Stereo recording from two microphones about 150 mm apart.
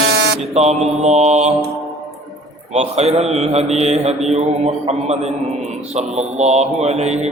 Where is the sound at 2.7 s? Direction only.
45° right (ahead or behind).